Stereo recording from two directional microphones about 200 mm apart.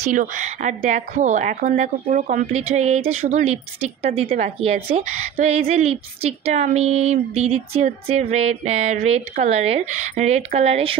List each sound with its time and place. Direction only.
0.1 s speech: 40° right (ahead or behind)